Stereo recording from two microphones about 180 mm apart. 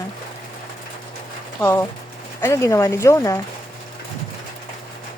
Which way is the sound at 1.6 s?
15° left (ahead or behind).